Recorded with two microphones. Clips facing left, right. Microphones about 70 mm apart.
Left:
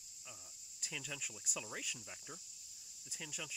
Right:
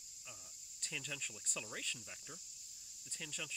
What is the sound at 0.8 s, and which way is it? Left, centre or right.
Speech, centre.